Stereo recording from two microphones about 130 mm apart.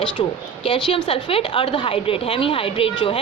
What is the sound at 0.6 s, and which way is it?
A woman's voice, 45° left (ahead or behind).